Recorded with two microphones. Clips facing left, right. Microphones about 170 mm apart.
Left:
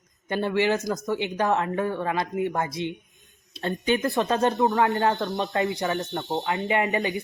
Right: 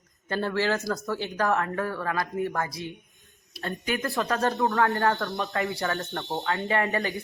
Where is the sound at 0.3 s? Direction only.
20° left (ahead or behind).